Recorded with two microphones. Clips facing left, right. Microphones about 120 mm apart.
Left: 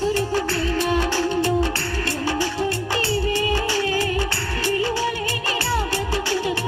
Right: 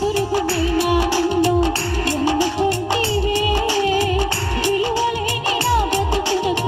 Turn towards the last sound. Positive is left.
turn(degrees=-20)  # may be behind; listen again after turning